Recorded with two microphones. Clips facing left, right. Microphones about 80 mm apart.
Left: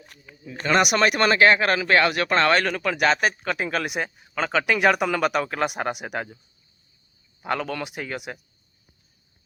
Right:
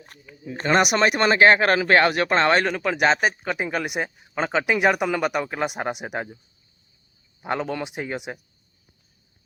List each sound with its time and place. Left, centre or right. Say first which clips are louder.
0.4 s speech: right 1 dB; right
7.4 s speech: right 1 dB; right